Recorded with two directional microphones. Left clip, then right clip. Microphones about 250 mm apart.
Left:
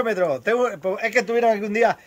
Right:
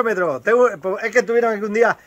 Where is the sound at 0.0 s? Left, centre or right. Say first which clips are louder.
Right 2 dB; centre.